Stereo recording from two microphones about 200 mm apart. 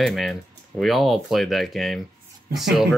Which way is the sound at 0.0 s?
Centre (ahead or behind).